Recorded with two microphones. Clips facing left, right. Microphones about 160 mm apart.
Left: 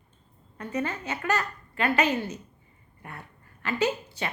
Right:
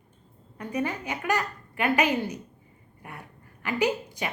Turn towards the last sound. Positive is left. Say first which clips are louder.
# right 1 dB
turn(degrees=-15)  # may be behind; listen again after turning